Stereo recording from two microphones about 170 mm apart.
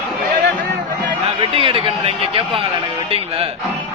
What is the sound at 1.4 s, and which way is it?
Speech, 30° right (ahead or behind).